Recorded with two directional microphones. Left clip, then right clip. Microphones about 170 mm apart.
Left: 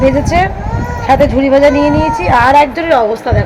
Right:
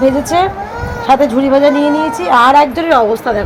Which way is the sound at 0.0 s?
15° right (ahead or behind).